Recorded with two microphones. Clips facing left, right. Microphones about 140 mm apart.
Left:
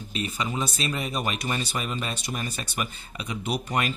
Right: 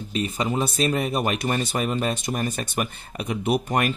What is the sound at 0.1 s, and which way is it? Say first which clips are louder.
Speech: right 5 dB; 40° right (ahead or behind).